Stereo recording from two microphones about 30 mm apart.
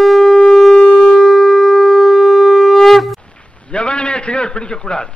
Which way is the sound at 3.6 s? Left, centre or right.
Left.